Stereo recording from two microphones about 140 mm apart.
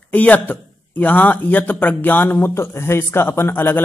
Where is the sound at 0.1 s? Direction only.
10° left (ahead or behind).